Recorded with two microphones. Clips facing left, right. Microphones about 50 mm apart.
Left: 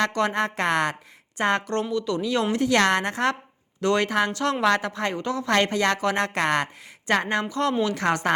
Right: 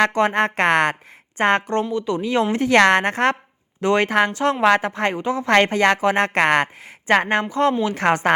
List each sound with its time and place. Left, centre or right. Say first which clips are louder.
0.1 s a woman's voice: right 5 dB; right
1.7 s a woman's voice: right 4 dB; right
3.8 s a woman's voice: right 4 dB; right
5.5 s a woman's voice: right 6 dB; right
6.2 s a woman's voice: right 6 dB; right